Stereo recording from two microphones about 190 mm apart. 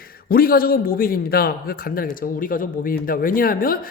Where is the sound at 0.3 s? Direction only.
50° left (ahead or behind).